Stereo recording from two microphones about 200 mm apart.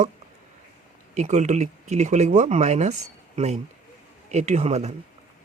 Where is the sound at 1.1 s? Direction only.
35° right (ahead or behind).